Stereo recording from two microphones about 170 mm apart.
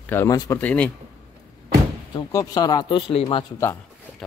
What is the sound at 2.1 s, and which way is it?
Speech, 20° left (ahead or behind).